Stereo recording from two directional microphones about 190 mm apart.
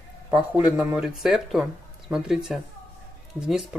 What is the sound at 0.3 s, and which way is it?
Speech, 5° right (ahead or behind).